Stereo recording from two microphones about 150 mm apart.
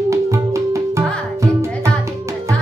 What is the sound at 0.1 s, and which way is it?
Music, 20° right (ahead or behind).